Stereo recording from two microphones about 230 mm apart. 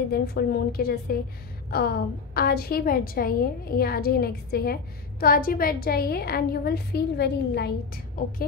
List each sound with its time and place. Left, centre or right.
0.1 s a woman's voice: left